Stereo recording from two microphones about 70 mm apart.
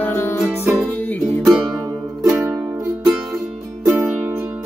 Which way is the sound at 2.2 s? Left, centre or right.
Right.